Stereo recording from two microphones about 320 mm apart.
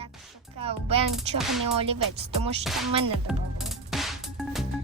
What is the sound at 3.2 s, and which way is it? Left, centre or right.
Music, centre.